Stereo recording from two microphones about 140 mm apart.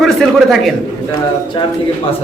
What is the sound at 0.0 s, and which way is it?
Speech, centre (ahead or behind).